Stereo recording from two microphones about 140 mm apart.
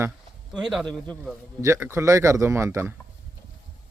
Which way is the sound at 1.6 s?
20° right (ahead or behind).